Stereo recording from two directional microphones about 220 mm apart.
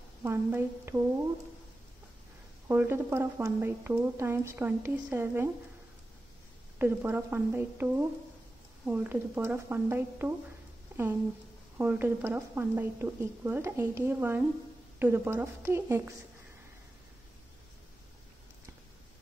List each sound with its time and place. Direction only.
0.2 s a woman's voice: 10° right (ahead or behind)
2.7 s a woman's voice: 10° right (ahead or behind)
6.8 s a woman's voice: 10° right (ahead or behind)
11.8 s a woman's voice: 10° right (ahead or behind)